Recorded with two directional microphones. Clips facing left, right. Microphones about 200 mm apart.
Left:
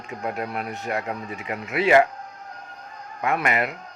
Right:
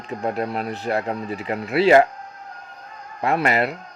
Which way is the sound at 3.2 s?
35° right (ahead or behind).